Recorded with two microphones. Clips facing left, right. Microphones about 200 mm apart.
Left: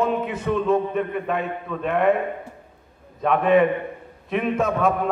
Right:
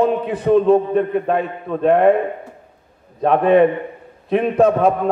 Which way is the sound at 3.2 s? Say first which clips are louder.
Right 5 dB; 35° right (ahead or behind).